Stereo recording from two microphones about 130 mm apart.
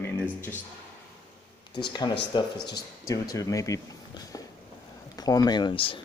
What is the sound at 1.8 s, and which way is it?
Speech, 35° left (ahead or behind).